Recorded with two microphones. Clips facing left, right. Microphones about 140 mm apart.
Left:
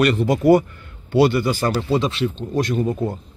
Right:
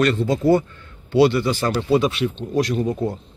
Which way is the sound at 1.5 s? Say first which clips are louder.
Right 1 dB; 5° left (ahead or behind).